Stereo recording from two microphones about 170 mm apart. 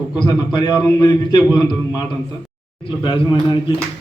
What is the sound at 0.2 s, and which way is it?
Speech, 25° left (ahead or behind).